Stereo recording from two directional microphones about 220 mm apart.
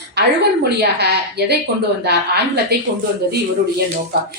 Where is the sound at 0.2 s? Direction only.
50° right (ahead or behind).